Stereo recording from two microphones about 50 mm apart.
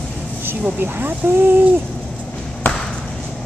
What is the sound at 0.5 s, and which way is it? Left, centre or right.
Speech, right.